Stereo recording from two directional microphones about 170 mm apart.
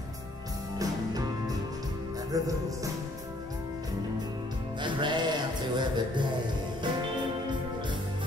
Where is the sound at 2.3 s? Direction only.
20° right (ahead or behind).